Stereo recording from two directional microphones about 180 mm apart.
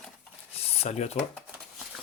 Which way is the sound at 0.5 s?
35° left (ahead or behind).